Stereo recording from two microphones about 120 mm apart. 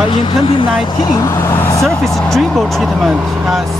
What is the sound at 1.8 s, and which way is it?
Speech, 5° left (ahead or behind).